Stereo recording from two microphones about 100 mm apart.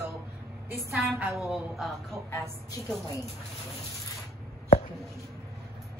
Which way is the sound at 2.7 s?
35° left (ahead or behind).